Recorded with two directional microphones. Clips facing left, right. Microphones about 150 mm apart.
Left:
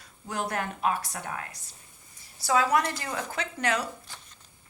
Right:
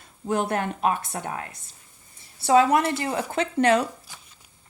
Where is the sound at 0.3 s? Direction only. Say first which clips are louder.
Right 7 dB; 25° right (ahead or behind).